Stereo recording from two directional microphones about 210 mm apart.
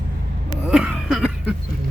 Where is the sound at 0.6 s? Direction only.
5° right (ahead or behind).